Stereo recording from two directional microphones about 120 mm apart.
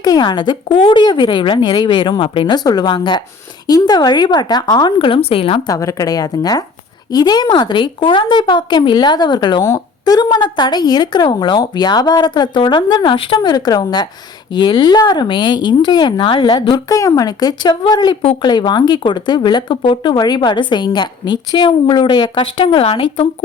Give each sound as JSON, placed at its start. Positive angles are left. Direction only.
{"t": 0.0, "sound": "speech", "side_deg": 35}
{"t": 5.6, "sound": "speech", "side_deg": 30}